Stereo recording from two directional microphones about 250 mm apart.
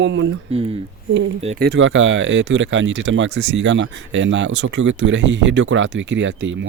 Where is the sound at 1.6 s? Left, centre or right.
Right.